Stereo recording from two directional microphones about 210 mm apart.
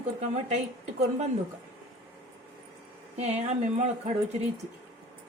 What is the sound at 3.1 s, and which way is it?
Speech, 30° right (ahead or behind).